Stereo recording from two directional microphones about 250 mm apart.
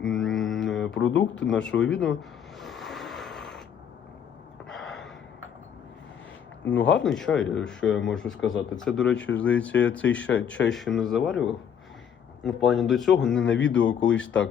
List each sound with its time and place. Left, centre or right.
0.0 s mantra: centre
0.9 s speech: left
1.5 s speech: centre
2.6 s a sound: centre
4.7 s gasp: centre
6.6 s speech: centre
12.5 s speech: centre